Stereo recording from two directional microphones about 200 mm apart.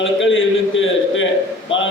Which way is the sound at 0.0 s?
70° left (ahead or behind).